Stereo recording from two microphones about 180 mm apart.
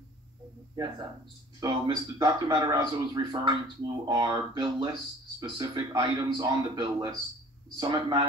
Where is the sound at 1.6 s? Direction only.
20° right (ahead or behind).